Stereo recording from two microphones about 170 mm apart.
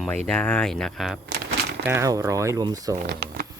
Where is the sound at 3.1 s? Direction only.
85° right.